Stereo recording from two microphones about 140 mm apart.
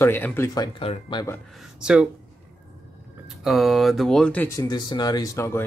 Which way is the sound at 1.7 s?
5° right (ahead or behind).